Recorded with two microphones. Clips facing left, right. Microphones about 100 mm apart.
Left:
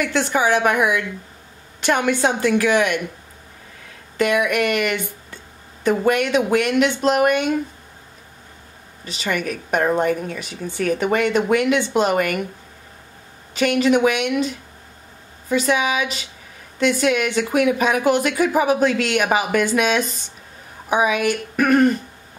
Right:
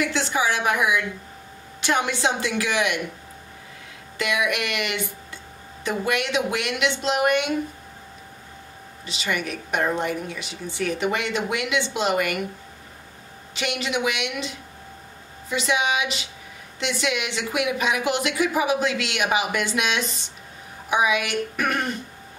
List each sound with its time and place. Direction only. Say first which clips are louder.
0.0 s speech: left 4 dB; 50° left (ahead or behind)
4.2 s speech: left 6 dB; 45° left (ahead or behind)
9.0 s speech: left 4 dB; 45° left (ahead or behind)
13.6 s speech: left 10 dB; 45° left (ahead or behind)